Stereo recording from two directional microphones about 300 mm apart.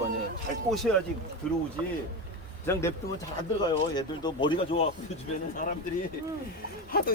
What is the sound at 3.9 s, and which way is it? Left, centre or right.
Speech, centre.